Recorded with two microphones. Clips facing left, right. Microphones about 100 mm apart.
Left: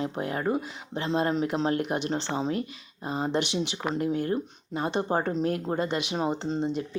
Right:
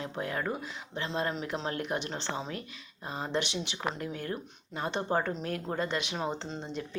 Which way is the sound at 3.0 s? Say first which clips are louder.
Left 5 dB; 20° left (ahead or behind).